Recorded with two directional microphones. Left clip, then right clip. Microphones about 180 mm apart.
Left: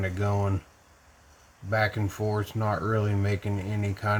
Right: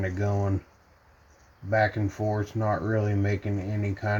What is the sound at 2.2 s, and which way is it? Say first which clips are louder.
Speech: even; centre (ahead or behind).